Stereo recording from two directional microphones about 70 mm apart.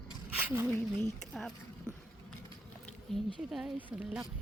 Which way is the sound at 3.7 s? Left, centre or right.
Right.